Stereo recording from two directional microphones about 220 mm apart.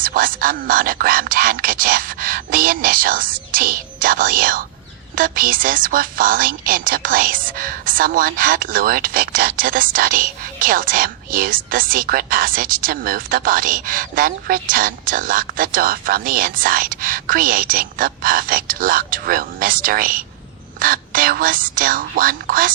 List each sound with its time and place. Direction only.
0.0 s a woman's voice: 40° right (ahead or behind)